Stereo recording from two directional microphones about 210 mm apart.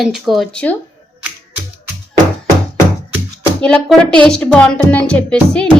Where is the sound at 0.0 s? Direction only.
Centre (ahead or behind).